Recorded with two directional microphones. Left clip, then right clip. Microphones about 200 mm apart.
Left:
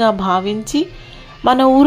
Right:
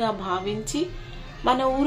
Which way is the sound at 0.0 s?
45° left (ahead or behind).